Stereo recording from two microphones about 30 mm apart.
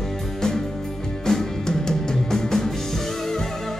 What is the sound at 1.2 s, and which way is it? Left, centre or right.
Music, centre.